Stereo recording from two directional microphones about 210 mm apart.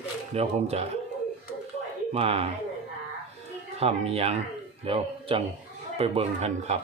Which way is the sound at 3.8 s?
30° right (ahead or behind).